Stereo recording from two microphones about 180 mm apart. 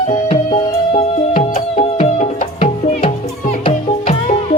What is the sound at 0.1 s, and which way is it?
Music, 35° left (ahead or behind).